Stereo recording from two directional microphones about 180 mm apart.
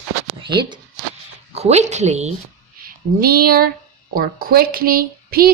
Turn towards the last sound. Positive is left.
turn(degrees=-55)  # may be behind; listen again after turning